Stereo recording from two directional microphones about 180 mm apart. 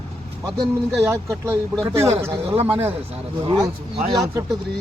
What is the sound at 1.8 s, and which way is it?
Speech, 15° right (ahead or behind).